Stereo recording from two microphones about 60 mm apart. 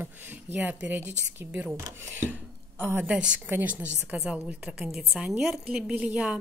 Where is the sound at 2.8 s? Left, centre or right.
Right.